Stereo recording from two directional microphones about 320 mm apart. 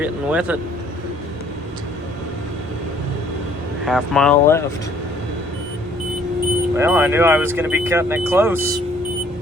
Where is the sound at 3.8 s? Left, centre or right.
Centre.